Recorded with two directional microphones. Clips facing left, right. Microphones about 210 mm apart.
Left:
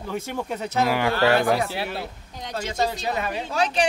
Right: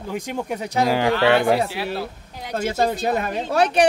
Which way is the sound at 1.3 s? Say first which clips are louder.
Right 3 dB; 25° right (ahead or behind).